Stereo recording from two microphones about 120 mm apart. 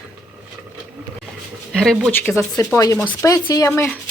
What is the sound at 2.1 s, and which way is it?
Speech, 15° left (ahead or behind).